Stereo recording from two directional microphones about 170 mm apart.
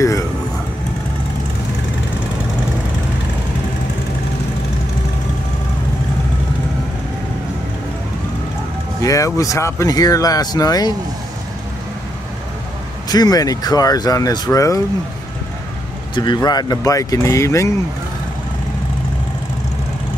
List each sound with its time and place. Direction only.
9.0 s speech: 20° left (ahead or behind)
13.1 s speech: 20° left (ahead or behind)
16.2 s speech: 25° left (ahead or behind)